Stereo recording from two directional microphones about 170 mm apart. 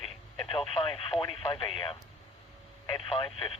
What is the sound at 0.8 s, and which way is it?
Speech, 30° left (ahead or behind).